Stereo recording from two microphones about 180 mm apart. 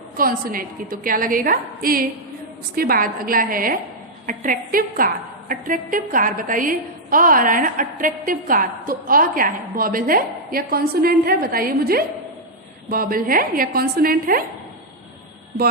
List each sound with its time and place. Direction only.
0.2 s a woman's voice: 55° right (ahead or behind)